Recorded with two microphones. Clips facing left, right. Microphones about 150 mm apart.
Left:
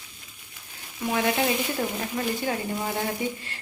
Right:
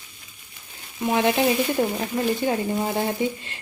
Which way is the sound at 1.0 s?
20° right (ahead or behind).